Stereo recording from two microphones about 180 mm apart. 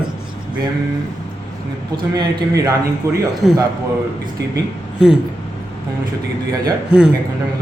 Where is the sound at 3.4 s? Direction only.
Centre (ahead or behind).